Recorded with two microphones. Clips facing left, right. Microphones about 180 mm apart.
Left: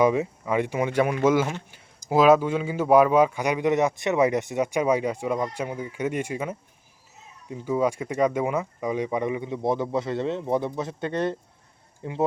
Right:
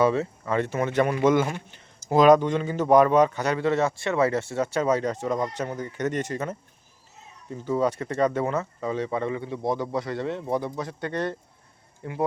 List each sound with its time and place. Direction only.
0.0 s speech: 15° left (ahead or behind)